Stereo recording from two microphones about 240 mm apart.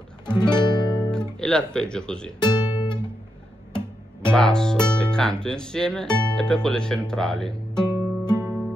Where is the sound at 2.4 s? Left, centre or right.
Centre.